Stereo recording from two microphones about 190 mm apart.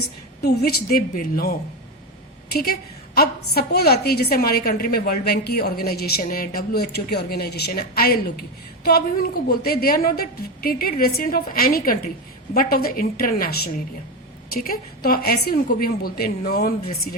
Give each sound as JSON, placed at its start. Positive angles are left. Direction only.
{"t": 0.4, "sound": "a woman's voice", "side_deg": 55}